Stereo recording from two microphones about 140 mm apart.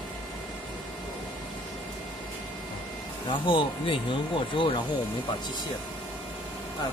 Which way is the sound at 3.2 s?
35° left (ahead or behind).